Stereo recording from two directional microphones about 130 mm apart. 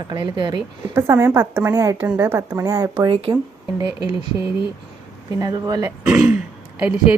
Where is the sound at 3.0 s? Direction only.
45° right (ahead or behind).